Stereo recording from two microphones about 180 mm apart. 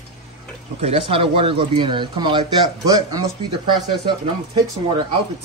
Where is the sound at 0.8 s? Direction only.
35° right (ahead or behind).